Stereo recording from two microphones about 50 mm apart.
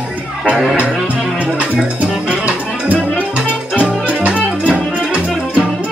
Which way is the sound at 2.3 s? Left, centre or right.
Right.